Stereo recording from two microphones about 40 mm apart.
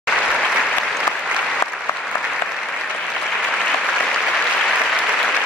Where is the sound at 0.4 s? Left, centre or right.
Centre.